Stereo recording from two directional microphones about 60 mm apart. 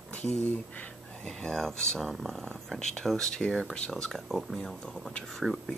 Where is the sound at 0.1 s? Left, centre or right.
Left.